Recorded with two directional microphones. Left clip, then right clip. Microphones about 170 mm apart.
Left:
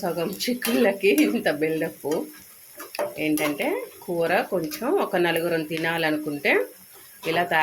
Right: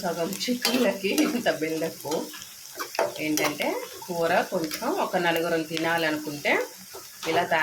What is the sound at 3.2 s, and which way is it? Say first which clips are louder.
Speech: left 2 dB; 40° left (ahead or behind).